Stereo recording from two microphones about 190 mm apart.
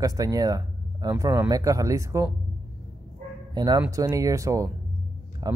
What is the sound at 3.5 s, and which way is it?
Speech, 20° right (ahead or behind).